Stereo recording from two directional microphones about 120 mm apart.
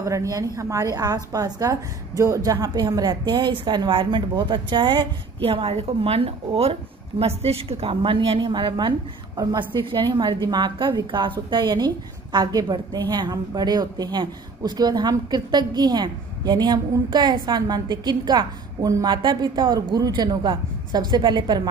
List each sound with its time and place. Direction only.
0.0 s a woman's voice: 25° right (ahead or behind)